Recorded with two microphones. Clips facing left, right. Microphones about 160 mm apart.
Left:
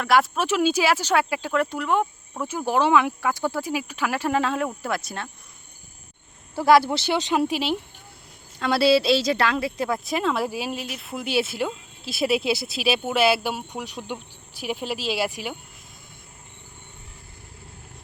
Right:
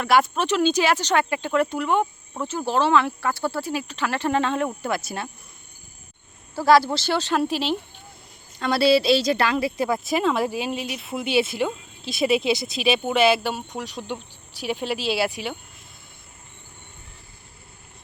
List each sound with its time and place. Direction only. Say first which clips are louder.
0.0 s speech: right 1 dB; centre (ahead or behind)
2.5 s speech: even; 10° left (ahead or behind); by 5.3 s 5° right (ahead or behind)
6.6 s speech: even; 20° left (ahead or behind); by 14.9 s 5° left (ahead or behind)